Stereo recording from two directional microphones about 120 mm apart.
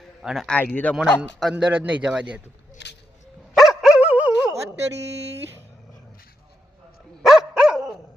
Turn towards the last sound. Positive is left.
turn(degrees=-5)  # may be behind; listen again after turning